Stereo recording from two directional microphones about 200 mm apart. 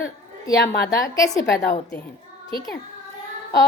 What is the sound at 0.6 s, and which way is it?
Speech, 55° left (ahead or behind).